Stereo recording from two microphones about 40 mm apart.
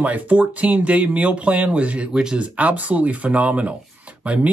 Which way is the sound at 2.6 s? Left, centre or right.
Right.